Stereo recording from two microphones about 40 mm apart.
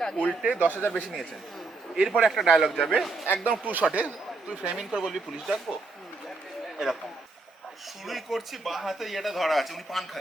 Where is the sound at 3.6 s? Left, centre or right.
Right.